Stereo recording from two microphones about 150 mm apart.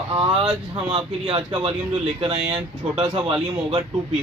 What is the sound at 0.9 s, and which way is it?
Speech, 40° right (ahead or behind).